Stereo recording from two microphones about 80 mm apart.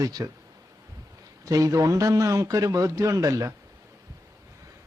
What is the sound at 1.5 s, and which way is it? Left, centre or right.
A man's voice, right.